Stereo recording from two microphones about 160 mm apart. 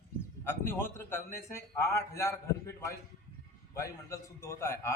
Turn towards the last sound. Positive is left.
turn(degrees=15)  # may be behind; listen again after turning